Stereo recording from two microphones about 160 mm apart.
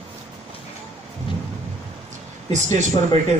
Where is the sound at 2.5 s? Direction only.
50° right (ahead or behind).